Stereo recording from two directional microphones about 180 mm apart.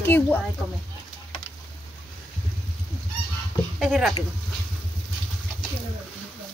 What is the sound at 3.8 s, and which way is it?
Speech, centre (ahead or behind).